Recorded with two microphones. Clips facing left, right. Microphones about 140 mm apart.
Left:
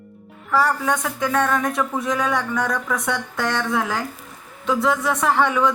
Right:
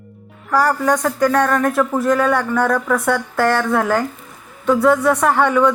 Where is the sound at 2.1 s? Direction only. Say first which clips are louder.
Right 6 dB; 55° right (ahead or behind).